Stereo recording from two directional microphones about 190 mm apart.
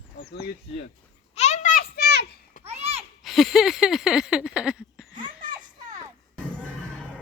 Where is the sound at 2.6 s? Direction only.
35° right (ahead or behind).